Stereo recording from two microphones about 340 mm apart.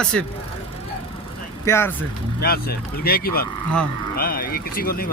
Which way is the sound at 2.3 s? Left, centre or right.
Left.